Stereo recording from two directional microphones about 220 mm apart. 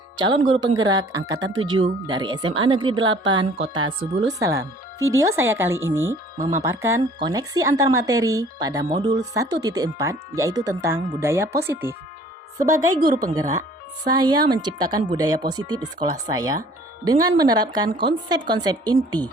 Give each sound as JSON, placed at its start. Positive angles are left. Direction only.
{"t": 0.2, "sound": "a woman's voice", "side_deg": -20}
{"t": 1.5, "sound": "speech", "side_deg": -60}
{"t": 1.7, "sound": "a woman's voice", "side_deg": -20}